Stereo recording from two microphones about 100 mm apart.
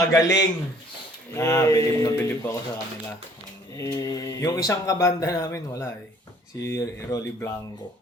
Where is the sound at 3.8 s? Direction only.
35° left (ahead or behind).